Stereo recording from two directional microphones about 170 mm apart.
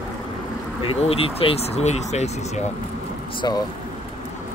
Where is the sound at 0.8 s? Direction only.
35° left (ahead or behind).